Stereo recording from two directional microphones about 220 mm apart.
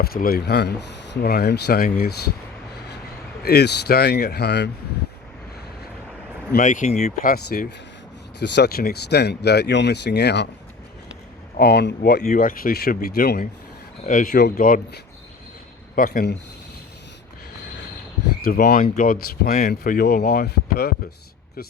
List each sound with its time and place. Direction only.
0.0 s speech: 45° left (ahead or behind)
3.4 s speech: 45° left (ahead or behind)
6.5 s speech: 35° left (ahead or behind)
8.4 s speech: 50° left (ahead or behind)
11.5 s speech: 45° left (ahead or behind)
12.3 s speech: 40° left (ahead or behind)
18.4 s speech: 45° left (ahead or behind)